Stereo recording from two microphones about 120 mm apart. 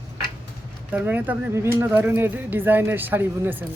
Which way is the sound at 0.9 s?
15° right (ahead or behind).